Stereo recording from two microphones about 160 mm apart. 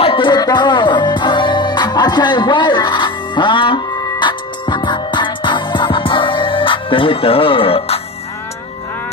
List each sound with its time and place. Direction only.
0.0 s music: 30° left (ahead or behind)